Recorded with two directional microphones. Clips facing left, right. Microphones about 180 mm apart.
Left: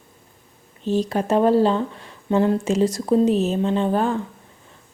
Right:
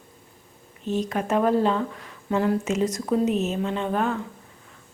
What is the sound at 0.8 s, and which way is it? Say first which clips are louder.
Speech: left 4 dB; 30° left (ahead or behind).